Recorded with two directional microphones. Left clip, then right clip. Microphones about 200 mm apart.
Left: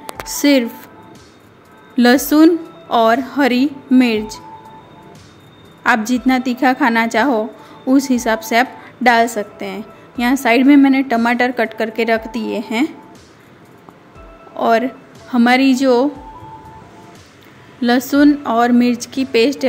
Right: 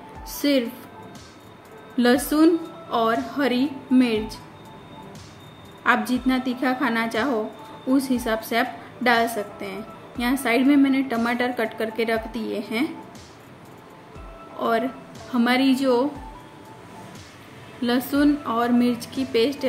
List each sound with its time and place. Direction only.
0.4 s speech: 45° left (ahead or behind)
2.0 s a woman's voice: 45° left (ahead or behind)
5.9 s a woman's voice: 40° left (ahead or behind)
14.6 s a woman's voice: 40° left (ahead or behind)
17.8 s a woman's voice: 35° left (ahead or behind)